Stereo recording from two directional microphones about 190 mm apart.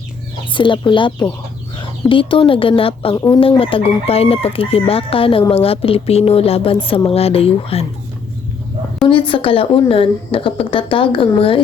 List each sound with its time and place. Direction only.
0.5 s chicken: 25° left (ahead or behind)
3.2 s speech: 15° left (ahead or behind)
3.4 s chicken: 30° left (ahead or behind)
6.8 s a woman's voice: 30° left (ahead or behind)
9.0 s chicken: 25° left (ahead or behind)